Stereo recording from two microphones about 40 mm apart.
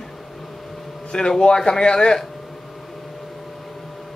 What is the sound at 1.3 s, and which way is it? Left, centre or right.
Speech, centre.